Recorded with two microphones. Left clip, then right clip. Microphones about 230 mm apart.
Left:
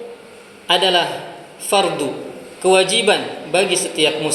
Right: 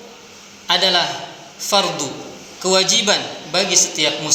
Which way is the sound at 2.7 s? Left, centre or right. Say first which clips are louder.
Left 2 dB; right.